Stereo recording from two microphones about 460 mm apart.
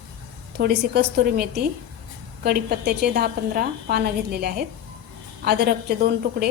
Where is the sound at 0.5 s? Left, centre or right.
Right.